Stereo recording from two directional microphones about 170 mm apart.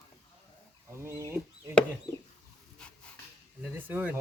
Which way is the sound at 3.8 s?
10° right (ahead or behind).